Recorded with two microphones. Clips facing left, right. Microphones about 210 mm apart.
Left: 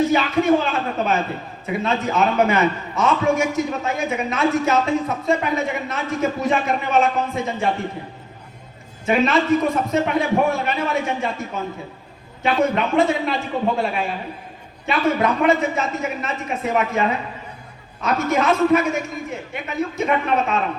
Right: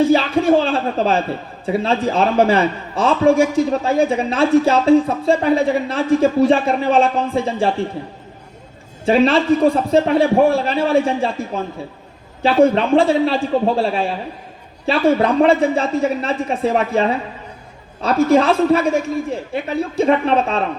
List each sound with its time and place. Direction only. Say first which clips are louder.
0.1 s a man's voice: right 3 dB; 30° right (ahead or behind)
9.0 s a man's voice: right 4 dB; 30° right (ahead or behind)